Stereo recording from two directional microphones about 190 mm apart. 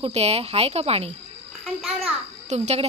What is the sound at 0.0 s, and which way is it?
Speech, 35° right (ahead or behind).